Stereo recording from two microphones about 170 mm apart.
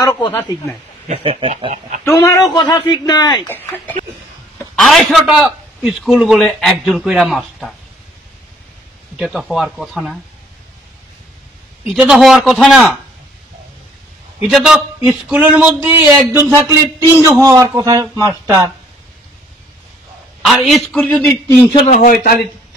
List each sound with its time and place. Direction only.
0.0 s speech: 25° left (ahead or behind)
1.0 s speech: 40° right (ahead or behind)
2.0 s speech: 20° left (ahead or behind)
3.4 s speech: 10° left (ahead or behind)
4.7 s a man's voice: centre (ahead or behind)
9.1 s a man's voice: 5° right (ahead or behind)
11.8 s a man's voice: 5° right (ahead or behind)
14.4 s a man's voice: 5° right (ahead or behind)
20.4 s a man's voice: centre (ahead or behind)
21.7 s a man's voice: 40° left (ahead or behind)
22.0 s a man's voice: 60° left (ahead or behind)